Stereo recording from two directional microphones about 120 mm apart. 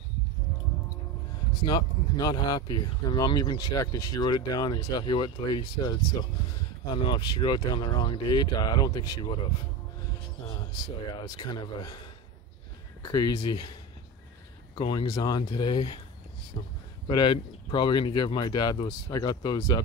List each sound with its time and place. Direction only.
1.6 s speech: 40° left (ahead or behind)
11.1 s speech: 35° left (ahead or behind)
13.0 s speech: 35° left (ahead or behind)
14.8 s speech: 40° left (ahead or behind)